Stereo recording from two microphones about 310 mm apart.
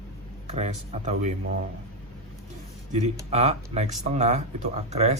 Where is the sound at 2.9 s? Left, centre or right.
Right.